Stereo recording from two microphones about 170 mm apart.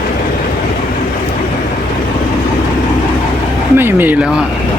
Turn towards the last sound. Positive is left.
turn(degrees=-10)  # may be behind; listen again after turning